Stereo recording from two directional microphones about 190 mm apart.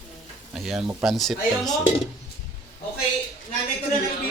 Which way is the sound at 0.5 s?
Centre (ahead or behind).